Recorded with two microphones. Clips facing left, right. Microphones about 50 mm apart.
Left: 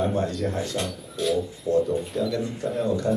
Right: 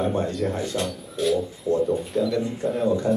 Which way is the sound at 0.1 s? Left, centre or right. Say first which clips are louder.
Right 1 dB; centre.